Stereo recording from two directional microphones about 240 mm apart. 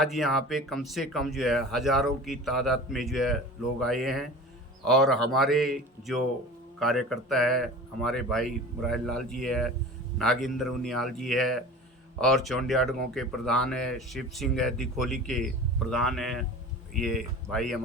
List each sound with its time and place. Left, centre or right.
0.0 s speech: centre